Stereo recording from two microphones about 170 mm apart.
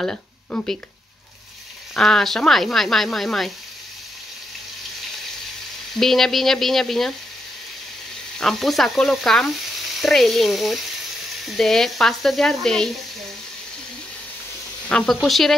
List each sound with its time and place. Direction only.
0.0 s speech: 5° left (ahead or behind)
2.0 s frying: 5° left (ahead or behind)
5.9 s frying: centre (ahead or behind)
8.4 s frying: centre (ahead or behind)
14.9 s frying: 5° left (ahead or behind)